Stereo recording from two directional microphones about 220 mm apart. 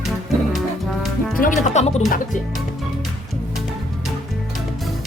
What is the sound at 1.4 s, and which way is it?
Music, 35° left (ahead or behind).